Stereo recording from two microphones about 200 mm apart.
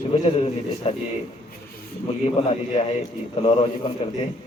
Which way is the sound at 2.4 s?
30° left (ahead or behind).